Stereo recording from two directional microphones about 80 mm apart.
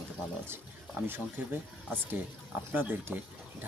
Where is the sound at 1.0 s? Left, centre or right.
Centre.